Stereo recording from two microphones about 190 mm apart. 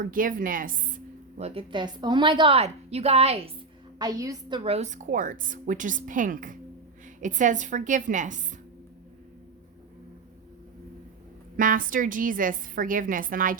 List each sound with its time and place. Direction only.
0.0 s a woman's voice: 45° right (ahead or behind)
3.9 s a woman's voice: 20° right (ahead or behind); by 8.4 s 40° right (ahead or behind)
11.5 s a woman's voice: 45° right (ahead or behind)